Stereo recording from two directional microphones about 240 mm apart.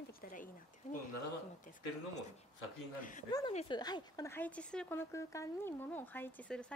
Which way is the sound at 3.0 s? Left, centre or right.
Left.